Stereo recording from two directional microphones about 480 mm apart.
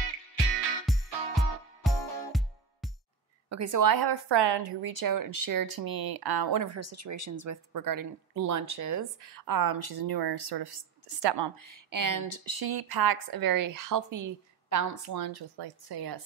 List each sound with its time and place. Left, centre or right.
0.8 s music: centre
3.4 s speech: right
5.0 s speech: right